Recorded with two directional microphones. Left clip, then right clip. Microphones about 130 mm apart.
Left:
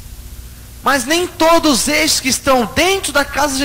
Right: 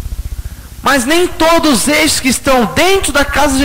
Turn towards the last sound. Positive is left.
turn(degrees=-40)  # may be behind; listen again after turning